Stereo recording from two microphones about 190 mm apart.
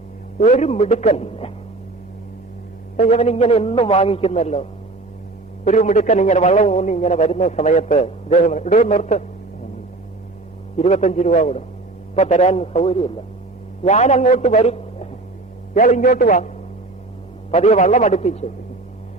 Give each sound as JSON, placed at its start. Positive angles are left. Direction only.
{"t": 0.3, "sound": "a man's voice", "side_deg": 40}
{"t": 3.0, "sound": "a man's voice", "side_deg": 40}
{"t": 10.8, "sound": "a man's voice", "side_deg": 35}
{"t": 17.5, "sound": "a man's voice", "side_deg": 40}